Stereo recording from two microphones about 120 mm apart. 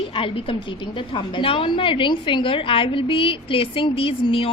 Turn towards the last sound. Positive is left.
turn(degrees=45)  # may be behind; listen again after turning